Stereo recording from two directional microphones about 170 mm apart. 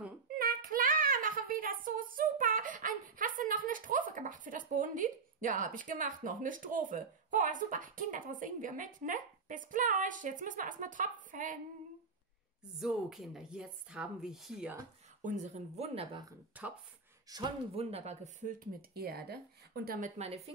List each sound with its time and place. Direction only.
0.4 s a sound: 55° right (ahead or behind)
12.7 s speech: centre (ahead or behind)
15.2 s speech: 45° right (ahead or behind)
16.5 s speech: 10° right (ahead or behind)
17.3 s speech: 20° right (ahead or behind)
17.7 s speech: 40° right (ahead or behind); by 20.1 s 60° right (ahead or behind)
20.2 s speech: 35° right (ahead or behind)